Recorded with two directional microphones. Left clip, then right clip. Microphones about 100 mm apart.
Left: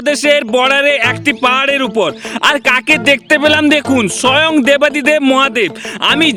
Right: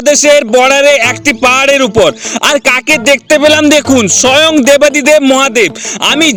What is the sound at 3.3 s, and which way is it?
Speech, 45° right (ahead or behind).